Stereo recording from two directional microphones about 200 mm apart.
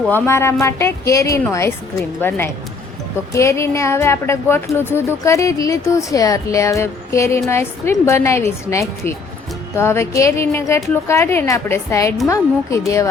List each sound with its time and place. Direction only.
0.1 s a woman's voice: 15° left (ahead or behind)
3.3 s a woman's voice: 15° left (ahead or behind)